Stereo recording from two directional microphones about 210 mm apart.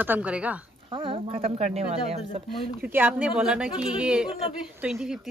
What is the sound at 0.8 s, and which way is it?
Speech, 25° right (ahead or behind).